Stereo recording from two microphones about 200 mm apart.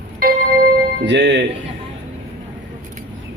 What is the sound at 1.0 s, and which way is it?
Speech, 60° right (ahead or behind).